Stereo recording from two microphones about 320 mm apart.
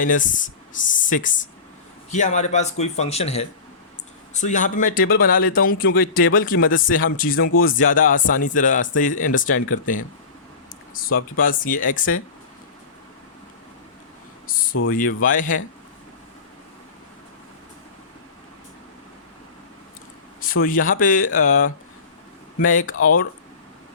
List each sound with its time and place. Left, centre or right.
0.0 s speech: left
14.4 s a sound: left
14.8 s speech: left
20.4 s speech: left